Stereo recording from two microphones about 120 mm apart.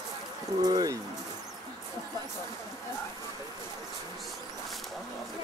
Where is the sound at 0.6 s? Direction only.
35° right (ahead or behind).